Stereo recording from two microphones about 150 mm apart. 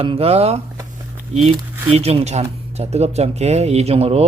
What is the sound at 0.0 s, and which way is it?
Speech, 40° right (ahead or behind).